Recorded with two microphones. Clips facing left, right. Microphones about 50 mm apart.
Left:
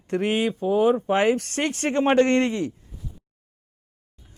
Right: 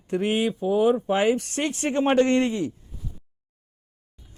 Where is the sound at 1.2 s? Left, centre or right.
Left.